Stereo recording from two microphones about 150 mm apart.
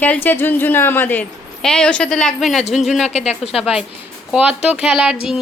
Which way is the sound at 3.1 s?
45° left (ahead or behind).